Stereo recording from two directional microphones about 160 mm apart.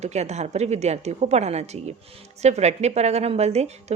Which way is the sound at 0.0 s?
45° right (ahead or behind).